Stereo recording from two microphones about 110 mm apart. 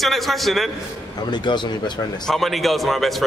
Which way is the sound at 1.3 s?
45° left (ahead or behind).